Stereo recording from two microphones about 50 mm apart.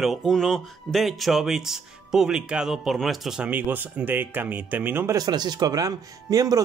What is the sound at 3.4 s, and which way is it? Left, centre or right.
Speech, right.